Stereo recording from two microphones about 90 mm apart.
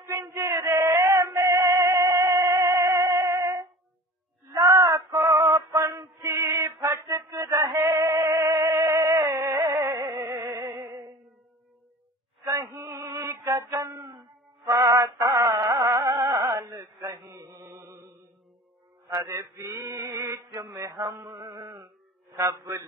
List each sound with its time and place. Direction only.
0.1 s male singing: 35° right (ahead or behind)
0.8 s music: 30° right (ahead or behind)
4.6 s male singing: 40° right (ahead or behind)
5.8 s male singing: 35° right (ahead or behind)
8.5 s music: 35° right (ahead or behind)
12.4 s male singing: 35° right (ahead or behind)
14.7 s music: 40° right (ahead or behind)
17.4 s chant: 35° right (ahead or behind)
19.0 s male singing: 35° right (ahead or behind)
21.3 s mantra: 60° right (ahead or behind)
22.3 s a sound: 40° right (ahead or behind)